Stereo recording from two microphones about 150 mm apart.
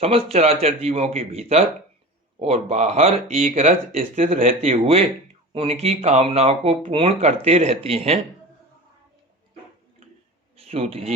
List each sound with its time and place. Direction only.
0.0 s speech: 40° right (ahead or behind)
4.6 s speech: 45° right (ahead or behind)
10.6 s speech: 40° right (ahead or behind)